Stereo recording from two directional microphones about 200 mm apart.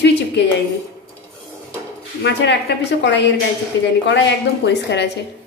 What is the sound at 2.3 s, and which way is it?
A woman's voice, 60° left (ahead or behind).